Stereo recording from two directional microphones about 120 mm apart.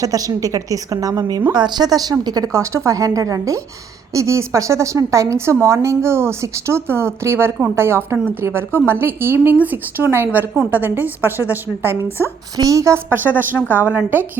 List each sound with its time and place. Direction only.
0.0 s a woman's voice: 30° right (ahead or behind); by 14.3 s 15° right (ahead or behind)